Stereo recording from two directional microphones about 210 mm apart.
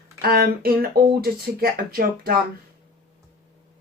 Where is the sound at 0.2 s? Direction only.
45° right (ahead or behind).